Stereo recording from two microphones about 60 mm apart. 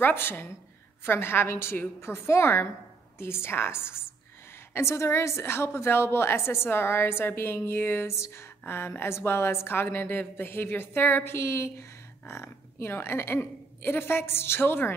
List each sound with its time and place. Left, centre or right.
0.0 s a woman's voice: left
11.3 s a woman's voice: left